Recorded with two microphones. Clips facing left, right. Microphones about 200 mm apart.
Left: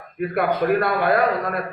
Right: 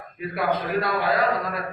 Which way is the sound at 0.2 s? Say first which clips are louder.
Left 5 dB; 55° left (ahead or behind).